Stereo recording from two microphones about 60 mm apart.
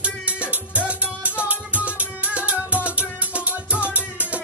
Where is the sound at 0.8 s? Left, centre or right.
Right.